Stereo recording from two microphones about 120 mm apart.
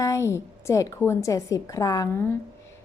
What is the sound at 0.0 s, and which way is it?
A woman's voice, 25° left (ahead or behind).